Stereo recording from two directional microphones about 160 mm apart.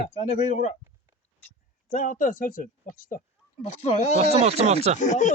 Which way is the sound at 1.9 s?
55° left (ahead or behind).